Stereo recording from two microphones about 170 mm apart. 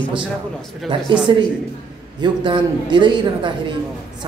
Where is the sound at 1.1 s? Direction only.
30° right (ahead or behind).